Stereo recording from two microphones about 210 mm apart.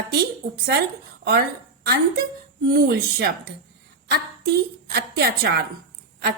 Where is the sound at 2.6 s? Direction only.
45° right (ahead or behind).